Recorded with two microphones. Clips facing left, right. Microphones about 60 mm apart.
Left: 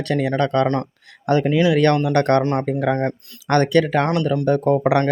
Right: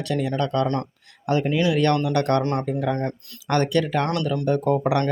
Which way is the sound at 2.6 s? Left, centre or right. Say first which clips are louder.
Left 4 dB; left.